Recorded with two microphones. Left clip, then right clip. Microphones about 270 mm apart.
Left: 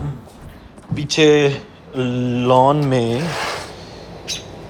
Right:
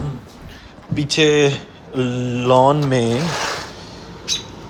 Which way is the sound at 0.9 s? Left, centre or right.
Centre.